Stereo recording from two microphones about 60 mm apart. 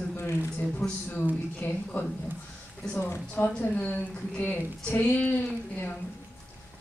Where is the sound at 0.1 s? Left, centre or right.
Left.